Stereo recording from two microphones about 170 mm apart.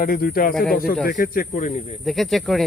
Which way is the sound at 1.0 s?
55° left (ahead or behind).